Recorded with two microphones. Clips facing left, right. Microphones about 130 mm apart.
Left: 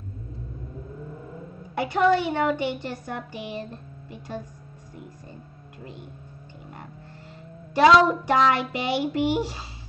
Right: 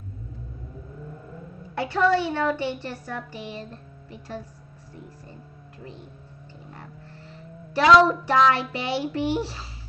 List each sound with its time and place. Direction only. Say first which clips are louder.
1.8 s child singing: left 1 dB; 15° left (ahead or behind)
7.7 s child singing: even; 15° left (ahead or behind)